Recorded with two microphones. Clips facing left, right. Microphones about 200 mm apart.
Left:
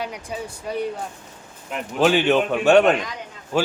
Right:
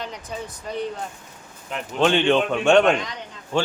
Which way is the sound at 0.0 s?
10° left (ahead or behind).